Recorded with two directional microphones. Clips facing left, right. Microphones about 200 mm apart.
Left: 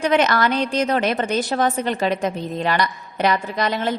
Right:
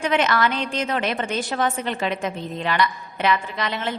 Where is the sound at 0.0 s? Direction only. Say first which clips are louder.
Left 3 dB; 40° left (ahead or behind).